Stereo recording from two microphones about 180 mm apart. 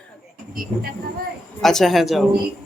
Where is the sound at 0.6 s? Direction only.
55° right (ahead or behind).